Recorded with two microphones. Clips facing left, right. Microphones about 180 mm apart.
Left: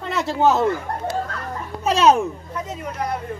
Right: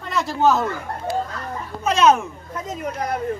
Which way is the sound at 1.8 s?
35° left (ahead or behind).